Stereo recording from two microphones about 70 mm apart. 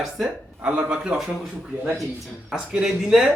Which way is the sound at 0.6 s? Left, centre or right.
Centre.